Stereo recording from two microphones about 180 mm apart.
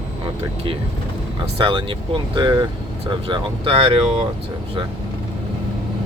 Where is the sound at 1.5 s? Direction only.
30° right (ahead or behind).